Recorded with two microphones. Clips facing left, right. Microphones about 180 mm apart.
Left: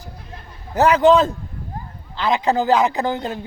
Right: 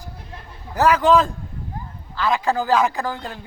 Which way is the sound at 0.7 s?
25° left (ahead or behind).